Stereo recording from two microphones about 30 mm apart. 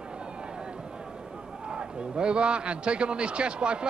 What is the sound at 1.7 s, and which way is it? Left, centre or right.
A man's voice, right.